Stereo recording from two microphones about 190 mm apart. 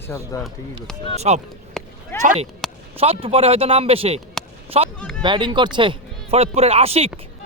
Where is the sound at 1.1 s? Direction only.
35° right (ahead or behind).